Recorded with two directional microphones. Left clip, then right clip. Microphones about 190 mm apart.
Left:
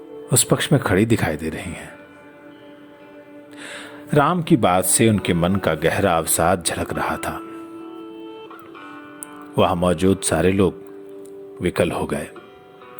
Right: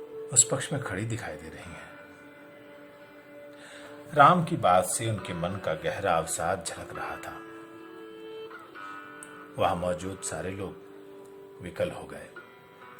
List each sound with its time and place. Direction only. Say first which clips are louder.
0.3 s speech: left 9 dB; 35° left (ahead or behind)
3.6 s speech: left 10 dB; 35° left (ahead or behind)
9.6 s speech: left 9 dB; 35° left (ahead or behind)